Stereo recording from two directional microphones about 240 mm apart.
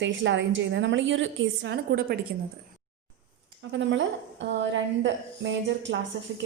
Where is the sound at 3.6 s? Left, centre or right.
Right.